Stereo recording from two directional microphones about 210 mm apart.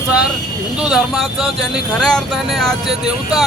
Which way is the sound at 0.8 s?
5° right (ahead or behind).